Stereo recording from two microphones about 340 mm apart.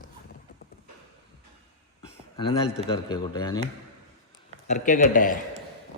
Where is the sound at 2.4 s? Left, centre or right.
Centre.